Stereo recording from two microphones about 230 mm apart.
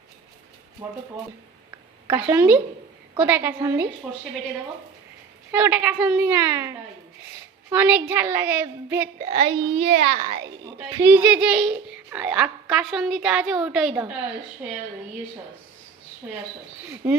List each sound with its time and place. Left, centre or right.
0.8 s a woman's voice: centre
2.0 s a woman's voice: centre
5.5 s a woman's voice: centre
9.3 s a child's voice: right
10.9 s a woman's voice: centre
17.0 s a woman's voice: centre